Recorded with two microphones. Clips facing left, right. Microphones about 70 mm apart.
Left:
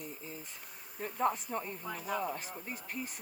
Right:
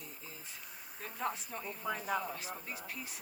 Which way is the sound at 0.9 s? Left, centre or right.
Left.